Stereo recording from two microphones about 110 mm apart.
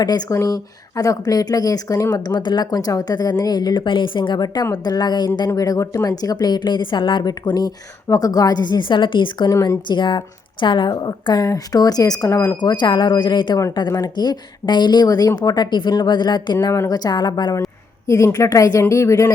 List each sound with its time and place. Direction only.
0.0 s a woman's voice: 35° left (ahead or behind)
9.5 s a woman's voice: 35° left (ahead or behind)
16.7 s a woman's voice: 30° left (ahead or behind)
18.0 s speech: 30° left (ahead or behind)